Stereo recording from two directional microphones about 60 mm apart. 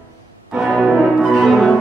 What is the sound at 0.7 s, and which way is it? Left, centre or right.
Music, centre.